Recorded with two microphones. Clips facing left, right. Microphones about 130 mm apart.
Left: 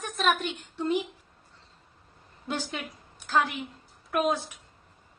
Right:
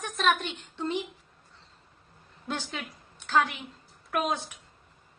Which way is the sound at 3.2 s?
Centre (ahead or behind).